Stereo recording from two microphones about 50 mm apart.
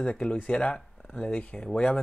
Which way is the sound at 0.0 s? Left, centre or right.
Left.